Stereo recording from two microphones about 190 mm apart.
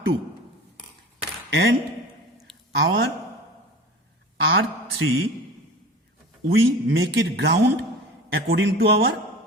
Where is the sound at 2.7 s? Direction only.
80° right.